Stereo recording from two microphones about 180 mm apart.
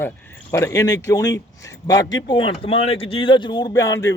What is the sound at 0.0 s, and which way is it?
Speech, 15° left (ahead or behind).